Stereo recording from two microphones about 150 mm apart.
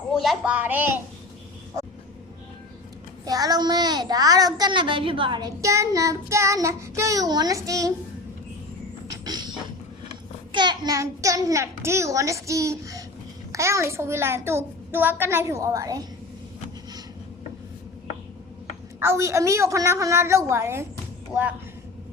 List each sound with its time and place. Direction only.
0.1 s a child's voice: centre (ahead or behind)
3.2 s a child's voice: 25° right (ahead or behind)
9.0 s a sound: 25° right (ahead or behind)
10.5 s a child's voice: 30° right (ahead or behind)
18.9 s a child's voice: 15° right (ahead or behind)